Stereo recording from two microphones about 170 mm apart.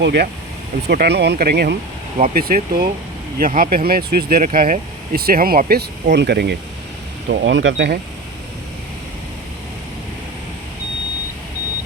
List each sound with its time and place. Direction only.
0.0 s speech: 75° right (ahead or behind)
2.1 s speech: 55° right (ahead or behind); by 6.6 s 75° right (ahead or behind)
7.3 s speech: 90° right